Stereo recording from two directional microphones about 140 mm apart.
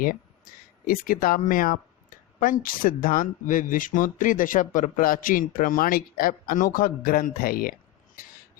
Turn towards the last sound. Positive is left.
turn(degrees=90)